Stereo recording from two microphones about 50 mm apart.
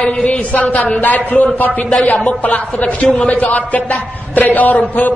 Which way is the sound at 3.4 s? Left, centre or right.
Left.